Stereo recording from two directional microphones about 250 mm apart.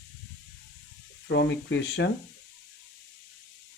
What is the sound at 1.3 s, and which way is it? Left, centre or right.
Speech, left.